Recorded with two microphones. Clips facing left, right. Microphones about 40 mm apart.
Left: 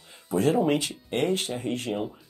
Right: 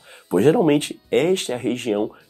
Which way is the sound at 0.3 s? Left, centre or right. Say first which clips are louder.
Right 7 dB; right.